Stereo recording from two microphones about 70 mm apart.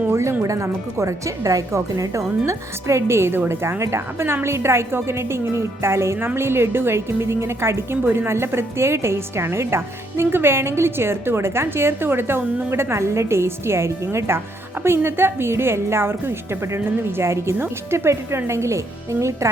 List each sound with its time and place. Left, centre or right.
0.1 s music: right
0.4 s a woman's voice: right